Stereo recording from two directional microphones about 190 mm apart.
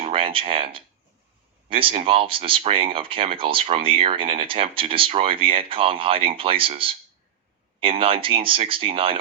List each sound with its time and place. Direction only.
0.0 s speech: 30° right (ahead or behind)